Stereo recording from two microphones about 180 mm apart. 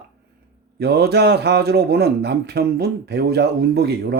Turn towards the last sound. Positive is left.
turn(degrees=-65)  # may be behind; listen again after turning